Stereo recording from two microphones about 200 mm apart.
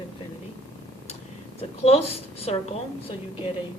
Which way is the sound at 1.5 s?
30° left (ahead or behind).